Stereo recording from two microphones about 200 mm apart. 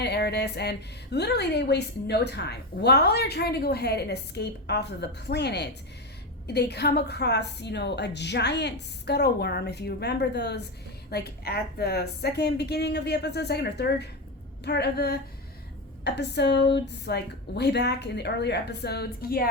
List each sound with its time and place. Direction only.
0.0 s a woman's voice: 55° left (ahead or behind)